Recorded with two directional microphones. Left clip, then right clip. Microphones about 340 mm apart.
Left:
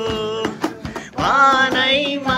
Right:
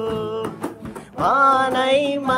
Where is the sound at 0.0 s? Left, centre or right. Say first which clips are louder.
Left 3 dB; centre.